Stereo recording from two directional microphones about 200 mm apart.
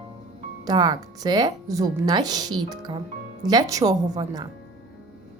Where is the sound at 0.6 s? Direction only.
20° right (ahead or behind).